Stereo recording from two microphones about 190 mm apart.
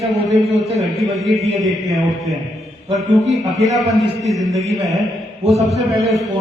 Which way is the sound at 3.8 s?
Centre (ahead or behind).